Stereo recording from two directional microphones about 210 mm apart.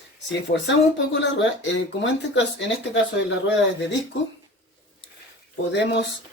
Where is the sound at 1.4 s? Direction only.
60° left (ahead or behind).